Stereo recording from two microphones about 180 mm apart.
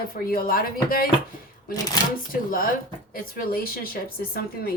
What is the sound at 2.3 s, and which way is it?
A woman's voice, 50° left (ahead or behind).